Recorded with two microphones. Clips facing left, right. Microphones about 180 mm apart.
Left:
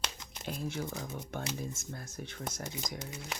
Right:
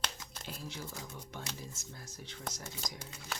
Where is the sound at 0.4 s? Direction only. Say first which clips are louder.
Left 8 dB; 55° left (ahead or behind).